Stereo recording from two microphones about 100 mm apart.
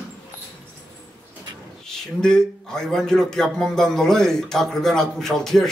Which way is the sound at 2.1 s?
5° left (ahead or behind).